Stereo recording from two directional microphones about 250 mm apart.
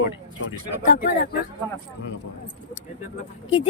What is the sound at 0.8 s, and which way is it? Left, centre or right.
Speech, left.